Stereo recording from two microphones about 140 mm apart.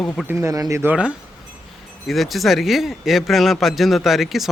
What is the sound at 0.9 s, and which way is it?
Speech, 5° right (ahead or behind).